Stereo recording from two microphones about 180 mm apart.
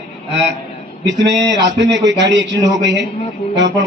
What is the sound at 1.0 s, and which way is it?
A man's voice, 75° right (ahead or behind).